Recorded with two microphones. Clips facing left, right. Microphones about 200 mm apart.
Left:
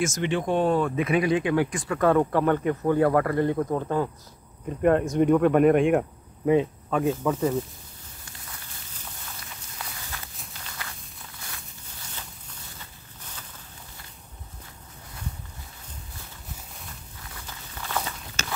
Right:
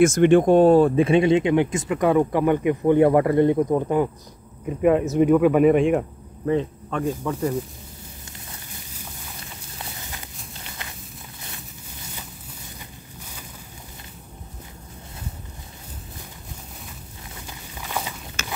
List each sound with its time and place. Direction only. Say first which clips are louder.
0.0 s speech: right 11 dB; 55° right (ahead or behind); by 4.1 s 15° right (ahead or behind)
4.6 s speech: right 3 dB; 5° right (ahead or behind)
6.4 s speech: left 1 dB; 10° left (ahead or behind)
9.8 s walk: right 2 dB; 25° right (ahead or behind)
13.2 s boat: right 2 dB; 10° right (ahead or behind)
17.3 s a sound: right 3 dB; 15° right (ahead or behind)